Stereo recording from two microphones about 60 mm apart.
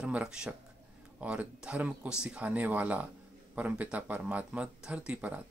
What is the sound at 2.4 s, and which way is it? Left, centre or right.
Speech, right.